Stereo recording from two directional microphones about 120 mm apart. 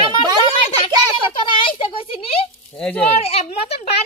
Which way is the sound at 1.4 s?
45° left (ahead or behind).